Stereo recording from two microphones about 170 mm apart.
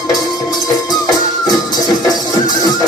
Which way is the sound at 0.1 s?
20° left (ahead or behind).